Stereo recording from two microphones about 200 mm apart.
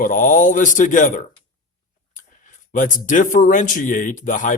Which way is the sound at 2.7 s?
40° left (ahead or behind).